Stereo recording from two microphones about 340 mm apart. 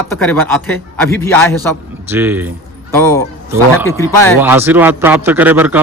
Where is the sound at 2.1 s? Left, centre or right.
Centre.